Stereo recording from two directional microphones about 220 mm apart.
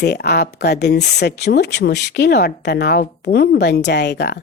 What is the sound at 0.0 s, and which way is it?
Speech, 50° left (ahead or behind).